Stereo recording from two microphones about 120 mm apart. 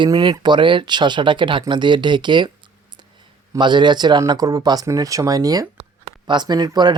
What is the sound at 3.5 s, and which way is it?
Speech, 40° right (ahead or behind).